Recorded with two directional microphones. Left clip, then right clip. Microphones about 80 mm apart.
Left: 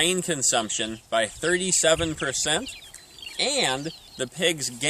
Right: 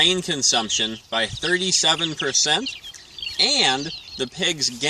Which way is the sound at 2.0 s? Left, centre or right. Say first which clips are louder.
Right 3 dB; centre.